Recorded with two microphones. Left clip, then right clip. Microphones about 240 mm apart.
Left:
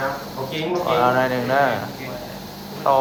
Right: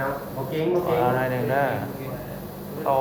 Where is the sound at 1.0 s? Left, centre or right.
Centre.